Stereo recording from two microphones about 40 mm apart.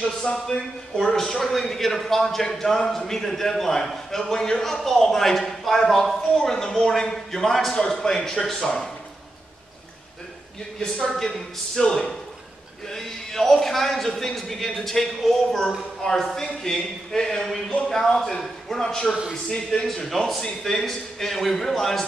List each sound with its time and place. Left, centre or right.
0.0 s a man's voice: centre
11.1 s a man's voice: centre
11.8 s speech: left
12.8 s a man's voice: centre